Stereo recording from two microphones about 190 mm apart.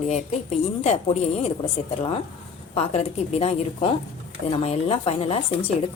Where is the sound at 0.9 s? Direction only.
35° left (ahead or behind).